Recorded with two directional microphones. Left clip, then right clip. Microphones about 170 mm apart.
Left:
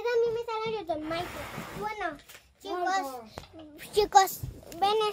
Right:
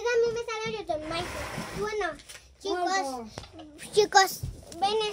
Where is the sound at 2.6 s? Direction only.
35° left (ahead or behind).